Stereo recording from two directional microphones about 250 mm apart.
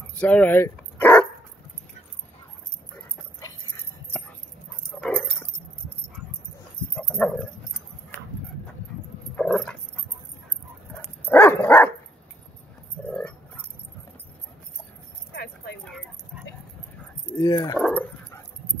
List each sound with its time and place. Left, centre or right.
0.2 s dog: centre
5.0 s dog: centre
7.0 s dog: centre
9.4 s dog: centre
11.2 s dog: centre
13.0 s dog: centre
15.8 s dog: centre
17.3 s speech: centre
17.7 s dog: centre